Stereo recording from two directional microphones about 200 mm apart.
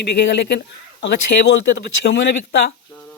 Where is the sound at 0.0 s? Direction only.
60° left (ahead or behind).